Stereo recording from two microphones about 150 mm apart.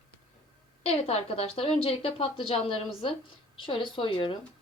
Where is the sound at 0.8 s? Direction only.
45° left (ahead or behind).